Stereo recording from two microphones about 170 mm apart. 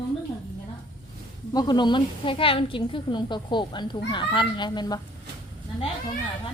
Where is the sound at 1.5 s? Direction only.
25° left (ahead or behind).